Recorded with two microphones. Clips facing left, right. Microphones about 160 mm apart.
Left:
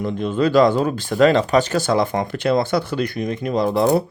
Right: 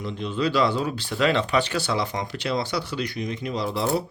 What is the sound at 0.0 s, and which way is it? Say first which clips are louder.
Speech: left 7 dB; 50° left (ahead or behind).